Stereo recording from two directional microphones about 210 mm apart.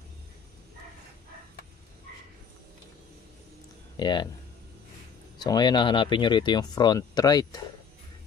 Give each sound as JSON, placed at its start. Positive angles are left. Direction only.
{"t": 3.9, "sound": "speech", "side_deg": 20}
{"t": 5.4, "sound": "speech", "side_deg": 20}